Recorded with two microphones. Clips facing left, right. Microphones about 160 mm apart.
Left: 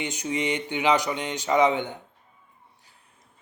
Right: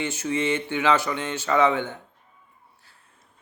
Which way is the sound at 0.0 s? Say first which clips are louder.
Right 2 dB; 15° left (ahead or behind).